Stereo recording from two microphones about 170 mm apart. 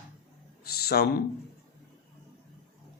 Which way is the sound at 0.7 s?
65° left (ahead or behind).